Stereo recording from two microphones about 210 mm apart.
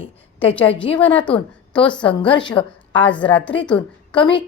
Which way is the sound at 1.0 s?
5° left (ahead or behind).